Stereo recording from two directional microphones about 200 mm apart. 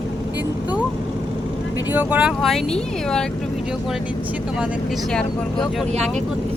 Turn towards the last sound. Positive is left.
turn(degrees=5)  # may be behind; listen again after turning